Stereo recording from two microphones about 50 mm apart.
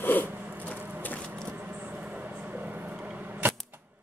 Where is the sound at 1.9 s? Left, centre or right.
Right.